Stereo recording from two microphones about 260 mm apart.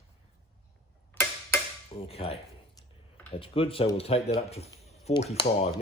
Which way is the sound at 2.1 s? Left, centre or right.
Left.